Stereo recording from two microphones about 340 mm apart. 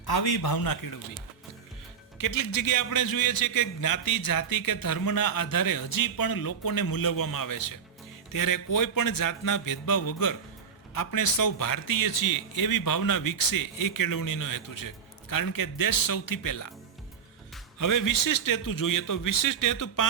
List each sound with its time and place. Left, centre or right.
0.0 s a man's voice: left
2.1 s a man's voice: left
17.7 s a man's voice: left